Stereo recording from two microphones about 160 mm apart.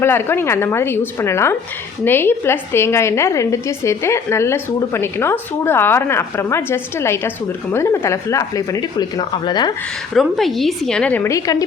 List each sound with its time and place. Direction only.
0.0 s a woman's voice: 15° left (ahead or behind)
10.2 s a woman's voice: centre (ahead or behind); by 11.5 s 20° left (ahead or behind)